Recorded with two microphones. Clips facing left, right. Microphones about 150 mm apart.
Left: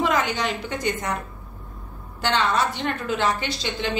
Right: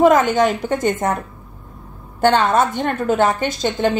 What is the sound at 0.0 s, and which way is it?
A woman's voice, 50° right (ahead or behind).